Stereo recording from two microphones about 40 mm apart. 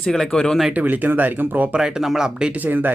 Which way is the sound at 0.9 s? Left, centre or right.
Right.